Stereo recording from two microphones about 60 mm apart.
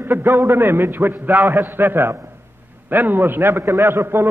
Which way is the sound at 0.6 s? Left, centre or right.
Right.